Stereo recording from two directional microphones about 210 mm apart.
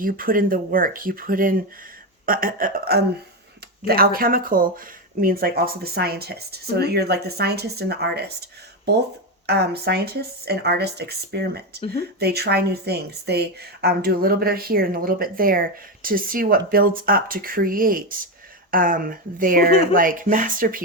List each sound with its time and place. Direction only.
0.0 s a woman's voice: 40° right (ahead or behind)